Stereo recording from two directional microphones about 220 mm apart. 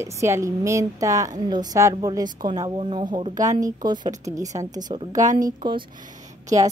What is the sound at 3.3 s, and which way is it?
Speech, 35° right (ahead or behind).